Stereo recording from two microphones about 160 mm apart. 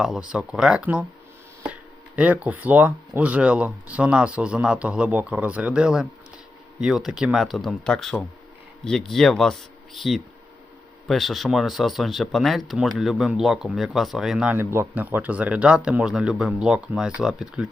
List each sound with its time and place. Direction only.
0.0 s speech: 5° right (ahead or behind)